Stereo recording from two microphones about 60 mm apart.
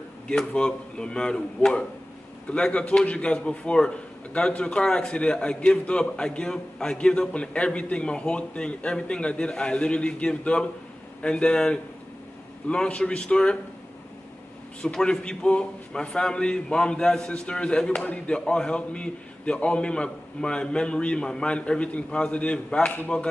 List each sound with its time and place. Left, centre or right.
0.3 s a man's voice: centre
14.8 s a man's voice: centre